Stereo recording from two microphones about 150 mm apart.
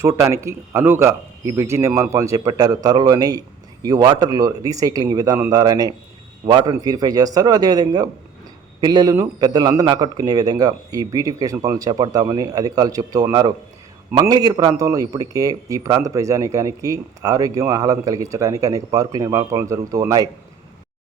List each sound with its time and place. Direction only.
0.0 s a man's voice: 20° right (ahead or behind)